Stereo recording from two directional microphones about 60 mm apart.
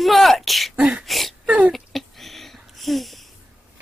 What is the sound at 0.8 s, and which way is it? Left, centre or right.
Speech, centre.